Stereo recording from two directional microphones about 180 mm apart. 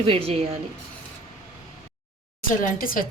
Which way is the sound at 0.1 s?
35° right (ahead or behind).